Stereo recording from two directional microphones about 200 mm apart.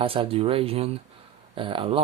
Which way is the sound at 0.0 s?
30° right (ahead or behind).